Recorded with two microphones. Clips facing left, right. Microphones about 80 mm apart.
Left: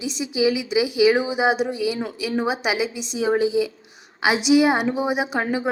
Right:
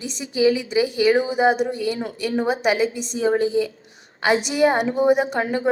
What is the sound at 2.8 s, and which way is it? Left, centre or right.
Speech, right.